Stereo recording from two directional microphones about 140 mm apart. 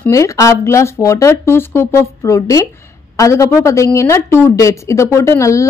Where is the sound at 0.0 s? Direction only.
20° left (ahead or behind).